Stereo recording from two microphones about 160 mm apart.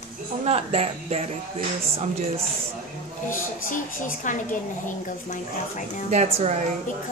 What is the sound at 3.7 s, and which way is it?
A woman's voice, 55° left (ahead or behind).